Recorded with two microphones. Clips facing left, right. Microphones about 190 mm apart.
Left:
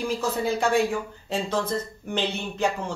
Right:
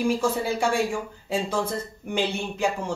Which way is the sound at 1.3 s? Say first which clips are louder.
Even; 10° right (ahead or behind).